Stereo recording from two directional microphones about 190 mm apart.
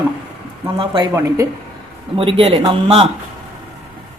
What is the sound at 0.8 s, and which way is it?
Speech, 30° right (ahead or behind).